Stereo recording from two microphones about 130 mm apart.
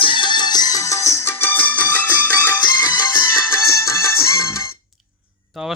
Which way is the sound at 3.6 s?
20° left (ahead or behind).